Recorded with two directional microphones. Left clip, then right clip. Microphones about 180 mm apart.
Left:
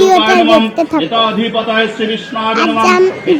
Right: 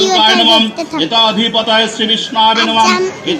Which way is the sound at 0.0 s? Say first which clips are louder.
Left 1 dB; 40° left (ahead or behind).